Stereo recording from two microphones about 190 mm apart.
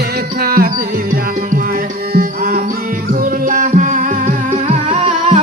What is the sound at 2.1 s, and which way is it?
Music, 50° right (ahead or behind).